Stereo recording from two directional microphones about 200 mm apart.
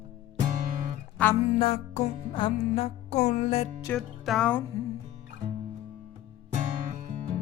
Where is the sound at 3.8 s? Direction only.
5° left (ahead or behind).